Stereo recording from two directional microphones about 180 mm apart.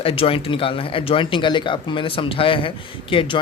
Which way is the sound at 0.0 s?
30° left (ahead or behind).